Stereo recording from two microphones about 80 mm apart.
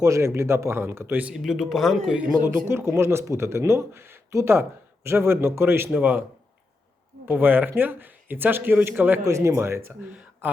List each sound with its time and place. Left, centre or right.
0.0 s speech: right
1.3 s speech: centre
2.4 s speech: right
7.3 s speech: right
9.2 s speech: right